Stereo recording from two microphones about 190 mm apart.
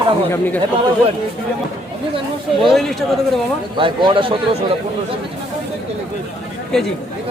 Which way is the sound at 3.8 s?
25° right (ahead or behind).